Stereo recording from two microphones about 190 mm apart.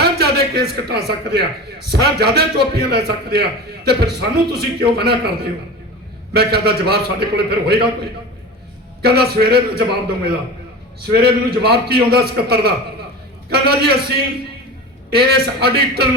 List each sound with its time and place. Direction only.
0.0 s a man's voice: 55° right (ahead or behind)
9.0 s a man's voice: 55° right (ahead or behind)
11.0 s a man's voice: 55° right (ahead or behind)
15.1 s a man's voice: 55° right (ahead or behind)